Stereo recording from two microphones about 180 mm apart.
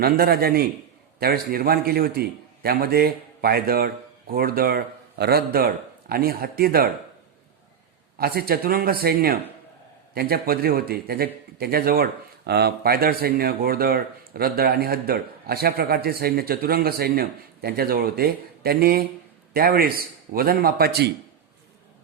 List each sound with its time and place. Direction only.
0.0 s speech: 60° right (ahead or behind)
8.2 s speech: 55° right (ahead or behind)